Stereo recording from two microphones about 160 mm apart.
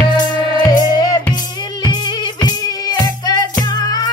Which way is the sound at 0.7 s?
25° left (ahead or behind).